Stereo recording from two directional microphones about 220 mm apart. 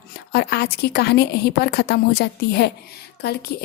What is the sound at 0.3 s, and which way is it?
Speech, 45° left (ahead or behind).